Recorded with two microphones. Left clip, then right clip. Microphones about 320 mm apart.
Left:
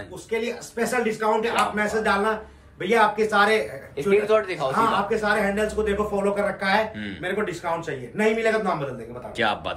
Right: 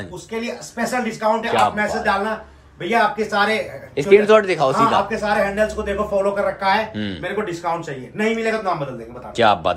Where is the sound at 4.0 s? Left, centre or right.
Right.